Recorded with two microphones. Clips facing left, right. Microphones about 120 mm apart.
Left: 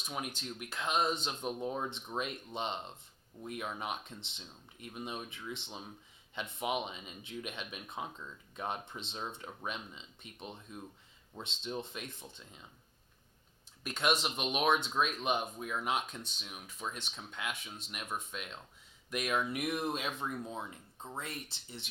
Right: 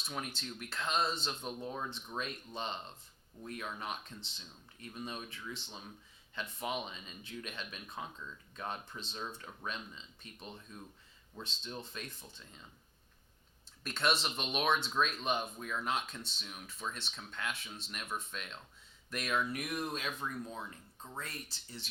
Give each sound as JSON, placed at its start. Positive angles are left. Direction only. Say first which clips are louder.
{"t": 0.1, "sound": "speech", "louder": "left 2 dB", "side_deg": 15}
{"t": 13.8, "sound": "speech", "louder": "left 1 dB", "side_deg": 15}